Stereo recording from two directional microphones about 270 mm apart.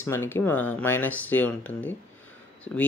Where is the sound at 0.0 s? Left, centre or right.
Centre.